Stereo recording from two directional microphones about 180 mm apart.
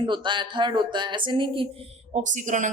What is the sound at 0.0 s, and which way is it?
A woman's voice, 25° right (ahead or behind).